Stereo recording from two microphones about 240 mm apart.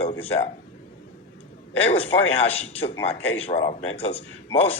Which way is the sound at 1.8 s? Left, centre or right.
Left.